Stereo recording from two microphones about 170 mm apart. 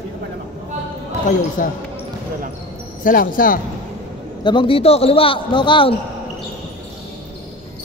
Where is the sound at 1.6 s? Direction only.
50° left (ahead or behind).